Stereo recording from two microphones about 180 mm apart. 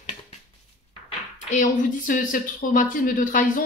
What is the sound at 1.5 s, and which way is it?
Speech, 45° left (ahead or behind).